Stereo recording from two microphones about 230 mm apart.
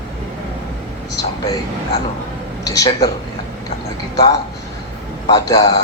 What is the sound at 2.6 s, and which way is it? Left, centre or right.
Speech, centre.